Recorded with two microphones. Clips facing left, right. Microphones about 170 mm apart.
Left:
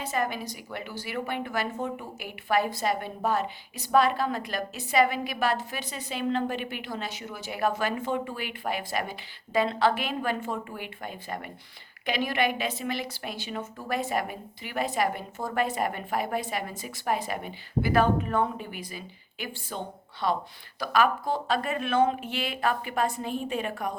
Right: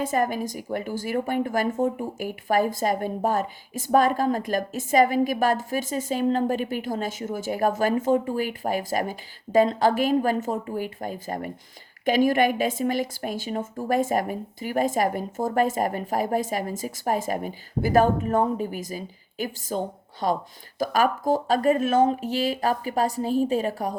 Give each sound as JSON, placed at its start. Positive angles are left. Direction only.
{"t": 0.0, "sound": "speech", "side_deg": -45}